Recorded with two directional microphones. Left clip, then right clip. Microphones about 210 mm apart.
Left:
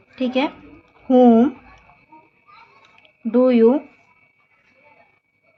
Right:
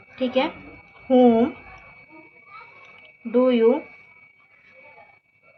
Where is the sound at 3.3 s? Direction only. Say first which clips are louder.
Left 3 dB; 50° left (ahead or behind).